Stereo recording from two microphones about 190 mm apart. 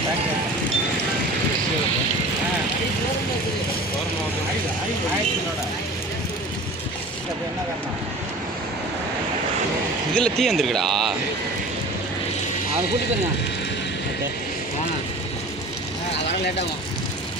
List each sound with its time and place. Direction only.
10.2 s speech: 5° left (ahead or behind)